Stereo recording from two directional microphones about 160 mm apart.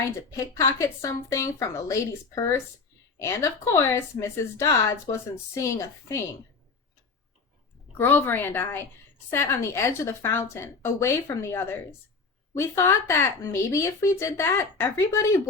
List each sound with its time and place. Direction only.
0.3 s speech: 20° left (ahead or behind)
7.9 s speech: 15° left (ahead or behind)